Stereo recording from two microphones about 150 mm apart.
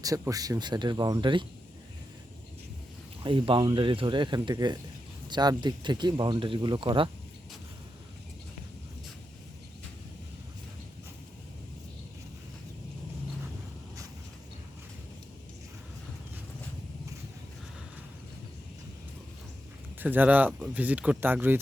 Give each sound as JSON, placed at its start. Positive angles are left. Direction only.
{"t": 0.0, "sound": "speech", "side_deg": -25}
{"t": 3.2, "sound": "speech", "side_deg": -35}
{"t": 20.0, "sound": "speech", "side_deg": -10}